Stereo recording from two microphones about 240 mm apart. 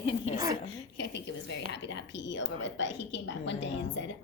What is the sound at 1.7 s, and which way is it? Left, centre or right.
A woman's voice, left.